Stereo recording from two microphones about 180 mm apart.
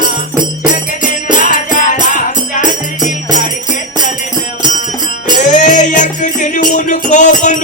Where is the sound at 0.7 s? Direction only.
45° left (ahead or behind).